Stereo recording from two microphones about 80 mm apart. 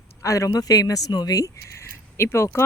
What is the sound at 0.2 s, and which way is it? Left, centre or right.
Speech, left.